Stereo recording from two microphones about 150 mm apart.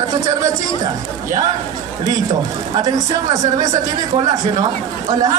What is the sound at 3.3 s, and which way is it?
Speech, 25° right (ahead or behind).